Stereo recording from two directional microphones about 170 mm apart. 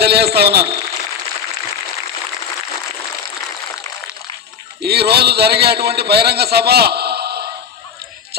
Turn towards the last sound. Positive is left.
turn(degrees=-70)  # may be behind; listen again after turning